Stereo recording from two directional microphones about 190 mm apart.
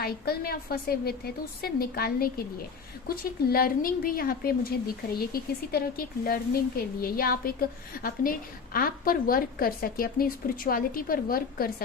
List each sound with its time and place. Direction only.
0.0 s speech: 55° left (ahead or behind)